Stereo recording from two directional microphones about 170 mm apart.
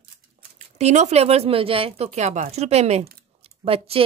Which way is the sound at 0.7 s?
40° right (ahead or behind).